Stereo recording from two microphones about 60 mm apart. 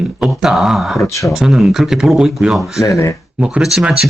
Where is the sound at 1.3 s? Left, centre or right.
Centre.